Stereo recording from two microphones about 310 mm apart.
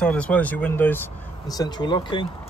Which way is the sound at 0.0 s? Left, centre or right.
Centre.